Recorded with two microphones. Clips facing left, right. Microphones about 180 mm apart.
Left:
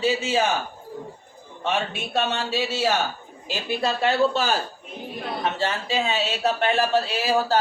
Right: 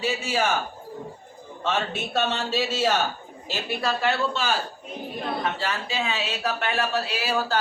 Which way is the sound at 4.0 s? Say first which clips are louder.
Left 4 dB; 40° left (ahead or behind).